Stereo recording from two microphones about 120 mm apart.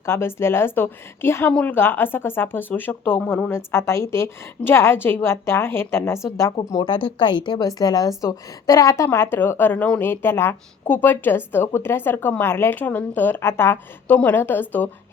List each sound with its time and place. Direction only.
0.0 s speech: 20° left (ahead or behind)
6.7 s speech: 30° left (ahead or behind)
6.9 s a woman's voice: 45° left (ahead or behind); by 14.8 s 15° left (ahead or behind)